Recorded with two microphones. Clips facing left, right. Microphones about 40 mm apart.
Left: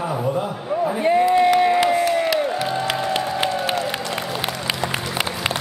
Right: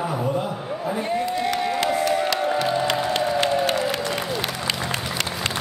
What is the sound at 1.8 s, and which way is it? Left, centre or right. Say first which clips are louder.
Crowd: left 3 dB; centre.